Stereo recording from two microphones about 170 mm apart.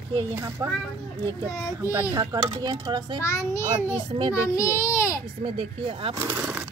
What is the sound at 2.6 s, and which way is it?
Speech, 25° right (ahead or behind).